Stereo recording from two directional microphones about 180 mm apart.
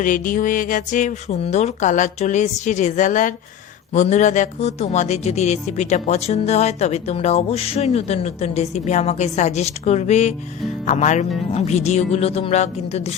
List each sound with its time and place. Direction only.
0.0 s speech: 50° left (ahead or behind)